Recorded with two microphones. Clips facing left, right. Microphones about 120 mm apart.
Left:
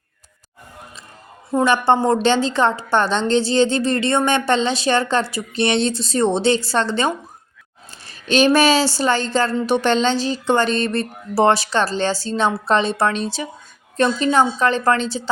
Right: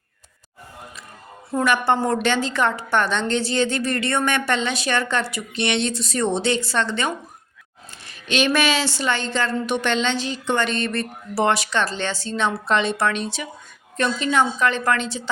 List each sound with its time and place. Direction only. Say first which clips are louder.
1.5 s a woman's voice: left 4 dB; 25° left (ahead or behind)